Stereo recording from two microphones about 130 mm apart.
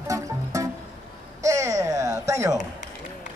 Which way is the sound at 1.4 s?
25° right (ahead or behind).